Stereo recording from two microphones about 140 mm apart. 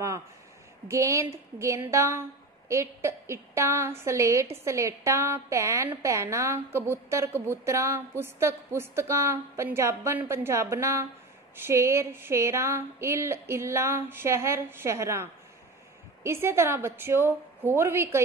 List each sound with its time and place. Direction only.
0.8 s a woman's voice: 20° right (ahead or behind)